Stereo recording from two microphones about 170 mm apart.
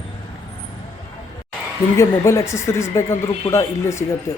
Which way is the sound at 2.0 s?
15° left (ahead or behind).